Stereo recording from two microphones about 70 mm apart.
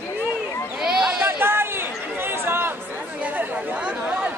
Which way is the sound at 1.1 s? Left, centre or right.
Right.